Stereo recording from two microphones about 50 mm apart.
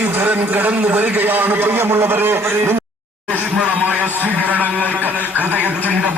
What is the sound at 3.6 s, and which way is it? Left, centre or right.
Speech, right.